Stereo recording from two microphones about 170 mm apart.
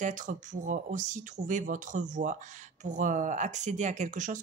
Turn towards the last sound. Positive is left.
turn(degrees=-50)  # may be behind; listen again after turning